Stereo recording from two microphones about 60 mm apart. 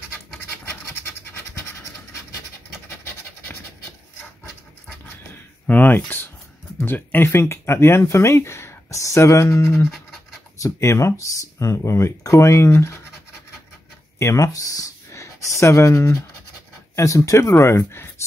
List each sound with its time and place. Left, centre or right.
5.0 s a sound: left
6.8 s speech: left
14.1 s speech: left